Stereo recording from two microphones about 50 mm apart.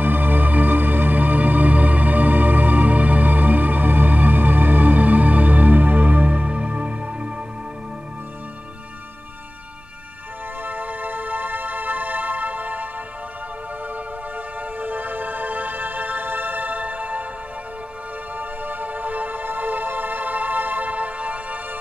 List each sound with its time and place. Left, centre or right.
0.0 s music: right
10.6 s music: right
14.8 s music: right
18.4 s music: right